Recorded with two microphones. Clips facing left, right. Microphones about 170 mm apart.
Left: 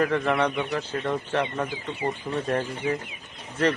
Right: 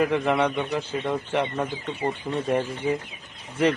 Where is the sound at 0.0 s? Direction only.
15° right (ahead or behind).